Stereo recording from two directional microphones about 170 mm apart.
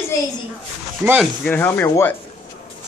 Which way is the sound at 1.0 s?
10° right (ahead or behind).